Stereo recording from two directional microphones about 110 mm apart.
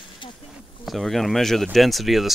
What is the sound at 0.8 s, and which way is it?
Speech, centre (ahead or behind).